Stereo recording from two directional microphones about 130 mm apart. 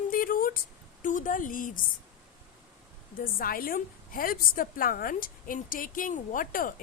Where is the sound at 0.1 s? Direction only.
90° left.